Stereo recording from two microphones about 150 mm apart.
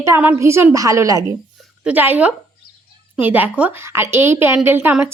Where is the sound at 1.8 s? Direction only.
10° right (ahead or behind).